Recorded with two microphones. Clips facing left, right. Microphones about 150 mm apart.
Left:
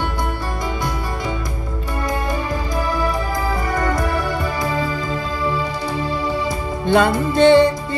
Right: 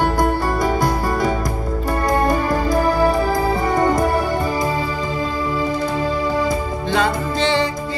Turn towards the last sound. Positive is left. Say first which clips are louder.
# left 7 dB
turn(degrees=55)  # may be behind; listen again after turning